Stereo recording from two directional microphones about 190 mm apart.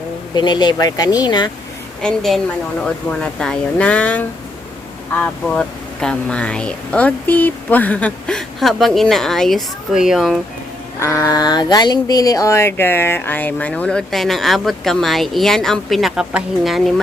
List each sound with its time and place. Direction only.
0.3 s speech: 25° left (ahead or behind)
2.0 s speech: centre (ahead or behind)
11.0 s speech: 15° left (ahead or behind); by 16.9 s centre (ahead or behind)